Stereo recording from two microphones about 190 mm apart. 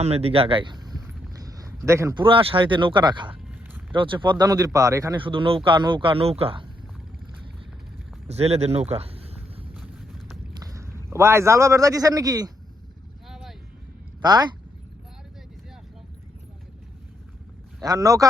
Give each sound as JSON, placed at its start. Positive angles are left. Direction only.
{"t": 0.0, "sound": "a sound", "side_deg": -30}
{"t": 2.2, "sound": "speech", "side_deg": -30}
{"t": 8.3, "sound": "speech", "side_deg": -35}
{"t": 9.7, "sound": "vehicle", "side_deg": -5}
{"t": 10.5, "sound": "a man's voice", "side_deg": -15}
{"t": 13.2, "sound": "vehicle", "side_deg": 0}
{"t": 14.2, "sound": "speech", "side_deg": -20}
{"t": 17.8, "sound": "speech", "side_deg": -20}